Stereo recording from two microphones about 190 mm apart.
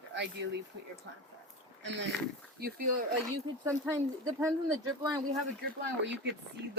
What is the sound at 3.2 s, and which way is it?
Speech, 15° right (ahead or behind).